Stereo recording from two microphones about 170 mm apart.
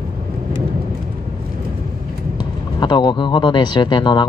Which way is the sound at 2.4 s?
25° left (ahead or behind).